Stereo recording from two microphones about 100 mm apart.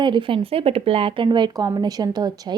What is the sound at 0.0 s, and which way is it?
A woman's voice, 55° right (ahead or behind).